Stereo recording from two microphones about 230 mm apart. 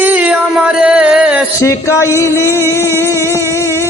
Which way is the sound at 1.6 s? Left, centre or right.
Centre.